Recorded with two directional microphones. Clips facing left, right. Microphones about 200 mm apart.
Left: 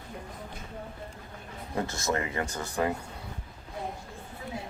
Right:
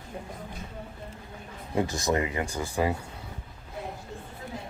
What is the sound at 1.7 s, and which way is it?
Speech, 15° right (ahead or behind).